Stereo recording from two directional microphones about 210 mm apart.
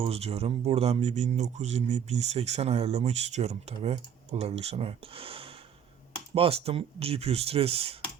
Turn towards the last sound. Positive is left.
turn(degrees=-30)  # may be behind; listen again after turning